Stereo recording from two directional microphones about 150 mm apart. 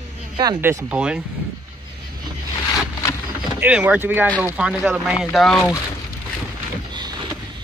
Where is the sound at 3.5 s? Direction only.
10° right (ahead or behind).